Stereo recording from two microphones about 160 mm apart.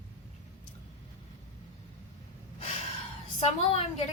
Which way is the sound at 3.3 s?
40° left (ahead or behind).